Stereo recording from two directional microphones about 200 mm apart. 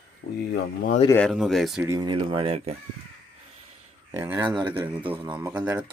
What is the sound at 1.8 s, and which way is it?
Speech, 15° right (ahead or behind).